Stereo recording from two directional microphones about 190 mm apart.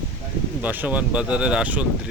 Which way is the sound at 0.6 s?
10° right (ahead or behind).